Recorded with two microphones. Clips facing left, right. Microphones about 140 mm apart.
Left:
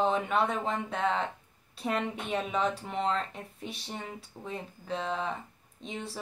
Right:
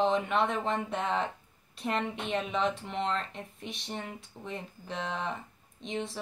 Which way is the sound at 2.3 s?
5° left (ahead or behind).